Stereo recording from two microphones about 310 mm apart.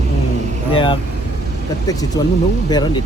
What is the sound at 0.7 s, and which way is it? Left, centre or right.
Speech, centre.